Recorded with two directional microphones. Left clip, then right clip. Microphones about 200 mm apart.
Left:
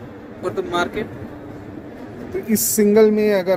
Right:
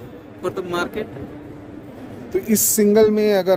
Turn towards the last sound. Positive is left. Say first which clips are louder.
# even
turn(degrees=-20)  # may be behind; listen again after turning